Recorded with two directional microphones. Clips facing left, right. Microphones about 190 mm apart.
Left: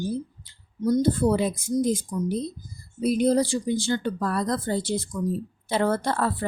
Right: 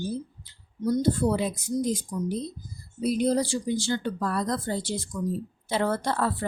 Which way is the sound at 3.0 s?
50° left (ahead or behind).